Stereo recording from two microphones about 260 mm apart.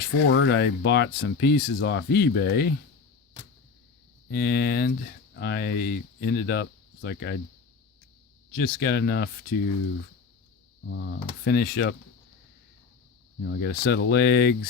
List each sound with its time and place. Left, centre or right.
0.3 s speech: left
4.3 s speech: left
8.4 s speech: left
10.9 s speech: left
13.4 s speech: left